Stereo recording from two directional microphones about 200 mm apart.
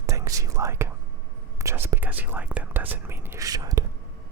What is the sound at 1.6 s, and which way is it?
Speech, 15° right (ahead or behind).